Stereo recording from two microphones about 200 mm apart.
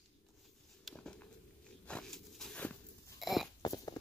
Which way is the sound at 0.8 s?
5° left (ahead or behind).